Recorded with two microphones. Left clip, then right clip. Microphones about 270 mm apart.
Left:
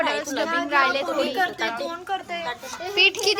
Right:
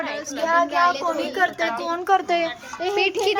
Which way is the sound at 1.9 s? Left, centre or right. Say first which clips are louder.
Right 9 dB; right.